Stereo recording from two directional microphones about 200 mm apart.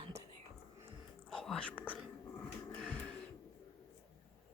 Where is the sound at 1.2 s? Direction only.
Centre (ahead or behind).